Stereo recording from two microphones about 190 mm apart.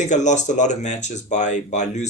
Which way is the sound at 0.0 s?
40° left (ahead or behind).